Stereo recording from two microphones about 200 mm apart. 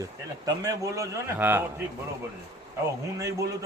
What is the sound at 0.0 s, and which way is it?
Speech, 15° right (ahead or behind).